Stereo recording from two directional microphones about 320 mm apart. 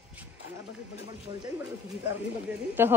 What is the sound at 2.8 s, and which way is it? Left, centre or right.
Speech, centre.